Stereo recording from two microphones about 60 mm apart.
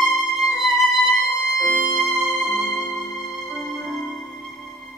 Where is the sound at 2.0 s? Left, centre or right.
Centre.